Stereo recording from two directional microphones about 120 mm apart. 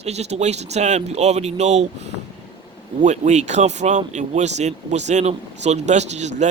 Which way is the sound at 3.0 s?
80° right.